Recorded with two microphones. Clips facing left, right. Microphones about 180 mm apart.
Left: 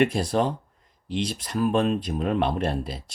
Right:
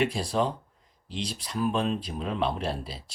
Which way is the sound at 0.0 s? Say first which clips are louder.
Left 4 dB; 55° left (ahead or behind).